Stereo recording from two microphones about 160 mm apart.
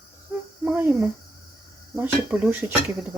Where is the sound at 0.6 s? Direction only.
10° right (ahead or behind).